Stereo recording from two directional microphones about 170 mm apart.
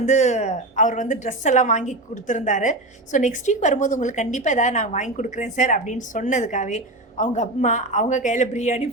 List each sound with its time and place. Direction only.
0.0 s a woman's voice: 45° left (ahead or behind)